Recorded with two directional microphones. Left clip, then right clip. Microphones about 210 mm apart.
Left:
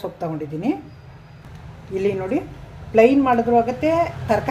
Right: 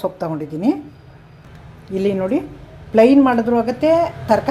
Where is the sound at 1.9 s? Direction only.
20° right (ahead or behind).